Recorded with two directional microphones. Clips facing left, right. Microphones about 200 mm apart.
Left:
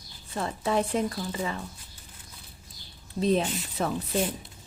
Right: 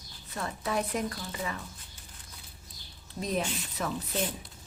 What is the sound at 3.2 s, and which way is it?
Speech, 30° left (ahead or behind).